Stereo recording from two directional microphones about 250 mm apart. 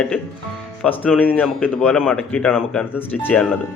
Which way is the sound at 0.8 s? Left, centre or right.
Centre.